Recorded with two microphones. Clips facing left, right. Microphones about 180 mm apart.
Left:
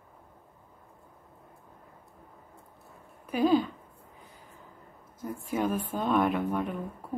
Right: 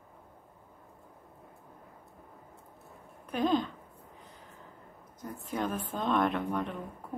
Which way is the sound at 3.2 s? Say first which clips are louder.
Left 4 dB; 5° left (ahead or behind).